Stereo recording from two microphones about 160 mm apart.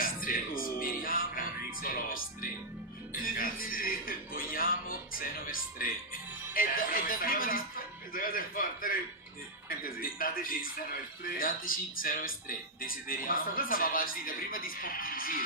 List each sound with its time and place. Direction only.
0.0 s music: 60° left (ahead or behind)
3.1 s speech: 60° left (ahead or behind)